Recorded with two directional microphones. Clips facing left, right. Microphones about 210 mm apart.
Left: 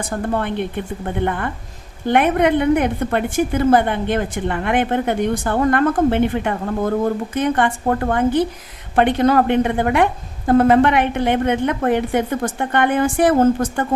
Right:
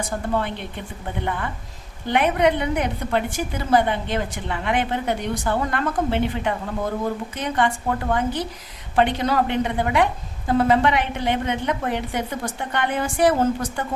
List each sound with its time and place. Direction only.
0.3 s a woman's voice: 55° left (ahead or behind)